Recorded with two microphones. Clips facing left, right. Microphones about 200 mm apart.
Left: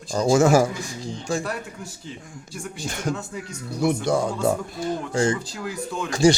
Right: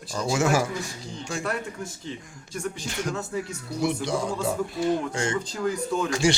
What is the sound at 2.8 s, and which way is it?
Speech, 50° left (ahead or behind).